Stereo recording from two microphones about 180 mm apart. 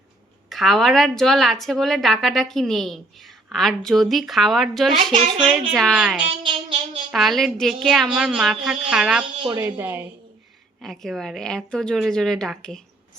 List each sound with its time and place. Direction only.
0.5 s a woman's voice: centre (ahead or behind)
9.4 s a woman's voice: 25° right (ahead or behind)
9.6 s a woman's voice: 10° right (ahead or behind)
10.8 s a woman's voice: centre (ahead or behind)